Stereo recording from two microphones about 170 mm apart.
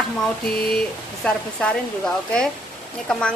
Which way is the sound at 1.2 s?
5° left (ahead or behind).